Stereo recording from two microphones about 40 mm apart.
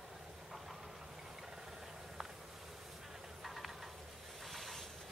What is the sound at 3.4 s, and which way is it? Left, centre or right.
Stir, centre.